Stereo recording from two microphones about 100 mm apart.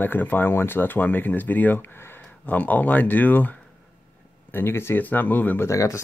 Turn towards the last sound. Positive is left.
turn(degrees=30)  # may be behind; listen again after turning